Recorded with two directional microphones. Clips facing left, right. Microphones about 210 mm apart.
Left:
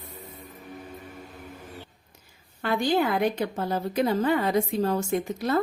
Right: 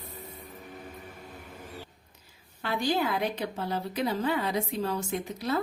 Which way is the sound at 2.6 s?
50° left (ahead or behind).